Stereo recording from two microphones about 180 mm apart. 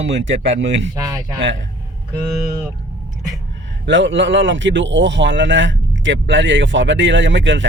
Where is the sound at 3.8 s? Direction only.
90° right.